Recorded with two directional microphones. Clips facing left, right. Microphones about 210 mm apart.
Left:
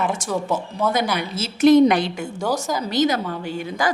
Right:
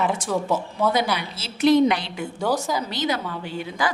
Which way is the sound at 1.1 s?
50° left (ahead or behind).